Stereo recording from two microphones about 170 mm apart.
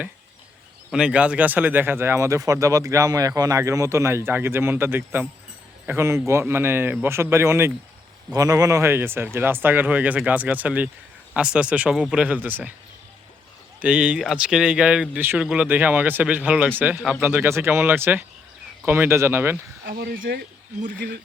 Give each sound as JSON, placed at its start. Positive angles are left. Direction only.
{"t": 0.9, "sound": "speech", "side_deg": -5}
{"t": 13.8, "sound": "speech", "side_deg": -5}
{"t": 19.8, "sound": "speech", "side_deg": -55}